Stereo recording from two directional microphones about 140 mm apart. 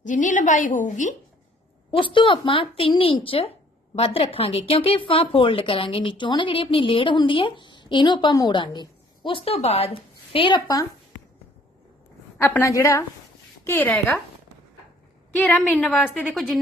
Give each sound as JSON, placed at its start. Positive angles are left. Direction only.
{"t": 0.0, "sound": "a woman's voice", "side_deg": 65}
{"t": 1.9, "sound": "a woman's voice", "side_deg": 35}
{"t": 12.4, "sound": "a woman's voice", "side_deg": 15}
{"t": 15.4, "sound": "a woman's voice", "side_deg": 10}